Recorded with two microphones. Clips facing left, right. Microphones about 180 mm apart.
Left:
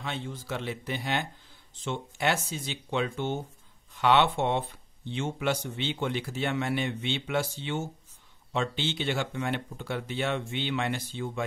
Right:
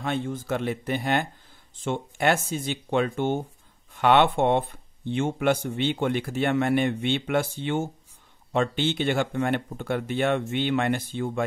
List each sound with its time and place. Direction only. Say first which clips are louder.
0.0 s speech: right 8 dB; 50° right (ahead or behind)